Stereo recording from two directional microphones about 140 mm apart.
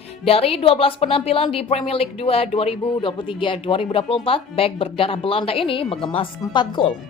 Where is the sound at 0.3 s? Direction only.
45° left (ahead or behind).